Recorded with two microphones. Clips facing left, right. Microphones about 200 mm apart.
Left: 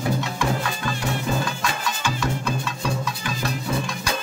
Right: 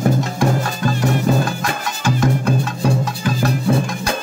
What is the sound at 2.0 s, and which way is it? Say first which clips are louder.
Music: right 10 dB; 50° right (ahead or behind).